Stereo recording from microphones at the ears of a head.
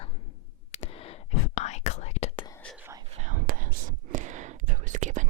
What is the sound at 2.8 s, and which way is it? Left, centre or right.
Whispering, right.